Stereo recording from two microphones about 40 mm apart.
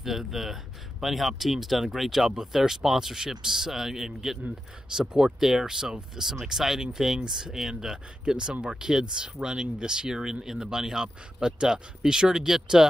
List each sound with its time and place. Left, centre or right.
0.0 s speech: centre